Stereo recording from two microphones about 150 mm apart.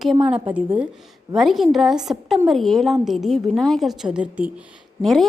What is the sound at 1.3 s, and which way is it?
A woman's voice, centre (ahead or behind).